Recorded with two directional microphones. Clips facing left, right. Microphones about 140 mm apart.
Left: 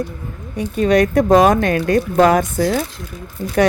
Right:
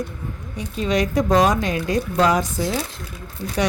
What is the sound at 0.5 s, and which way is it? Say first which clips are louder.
Speech: left 7 dB; 55° left (ahead or behind).